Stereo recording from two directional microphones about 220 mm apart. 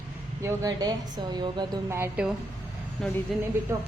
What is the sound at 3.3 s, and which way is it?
Speech, centre (ahead or behind).